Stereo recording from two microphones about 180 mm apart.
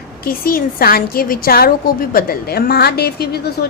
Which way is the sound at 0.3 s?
55° left (ahead or behind).